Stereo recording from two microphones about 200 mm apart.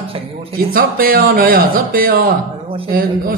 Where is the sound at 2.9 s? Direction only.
45° right (ahead or behind).